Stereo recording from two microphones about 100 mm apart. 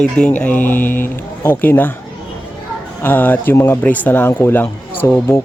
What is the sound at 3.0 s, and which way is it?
Speech, 20° left (ahead or behind).